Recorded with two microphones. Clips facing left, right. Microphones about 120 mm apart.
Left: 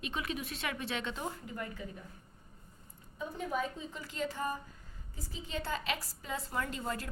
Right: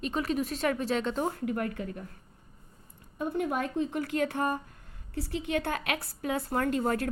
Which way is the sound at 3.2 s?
65° right (ahead or behind).